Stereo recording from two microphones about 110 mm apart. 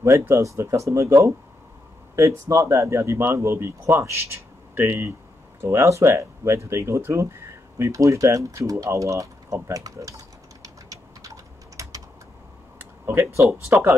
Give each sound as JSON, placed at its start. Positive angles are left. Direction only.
{"t": 0.0, "sound": "speech", "side_deg": -25}
{"t": 13.0, "sound": "speech", "side_deg": -25}